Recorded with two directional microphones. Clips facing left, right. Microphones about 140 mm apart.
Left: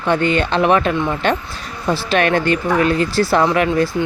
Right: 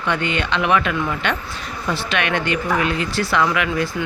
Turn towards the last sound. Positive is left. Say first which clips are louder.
# left 5 dB
turn(degrees=35)  # may be behind; listen again after turning